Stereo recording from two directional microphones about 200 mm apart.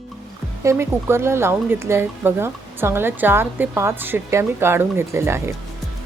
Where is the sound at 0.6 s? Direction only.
10° right (ahead or behind).